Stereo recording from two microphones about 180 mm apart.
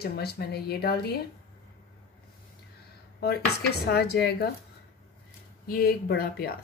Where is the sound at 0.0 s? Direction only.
60° left (ahead or behind).